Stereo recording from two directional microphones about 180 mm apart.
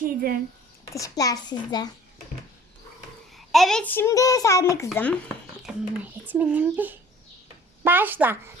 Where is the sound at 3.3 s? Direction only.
Centre (ahead or behind).